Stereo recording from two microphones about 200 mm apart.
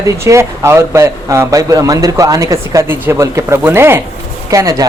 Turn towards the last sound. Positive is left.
turn(degrees=-15)  # may be behind; listen again after turning